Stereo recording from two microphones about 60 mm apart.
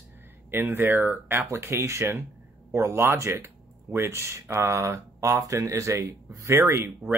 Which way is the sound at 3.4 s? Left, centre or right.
Right.